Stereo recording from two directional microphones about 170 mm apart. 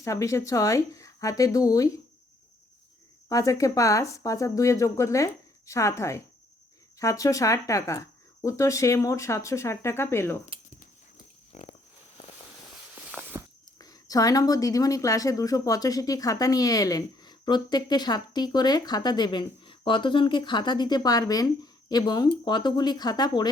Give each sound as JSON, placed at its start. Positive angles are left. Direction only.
{"t": 0.0, "sound": "speech", "side_deg": 20}
{"t": 3.2, "sound": "speech", "side_deg": 20}
{"t": 11.5, "sound": "pig", "side_deg": 40}
{"t": 13.1, "sound": "a sound", "side_deg": -5}
{"t": 13.7, "sound": "speech", "side_deg": 20}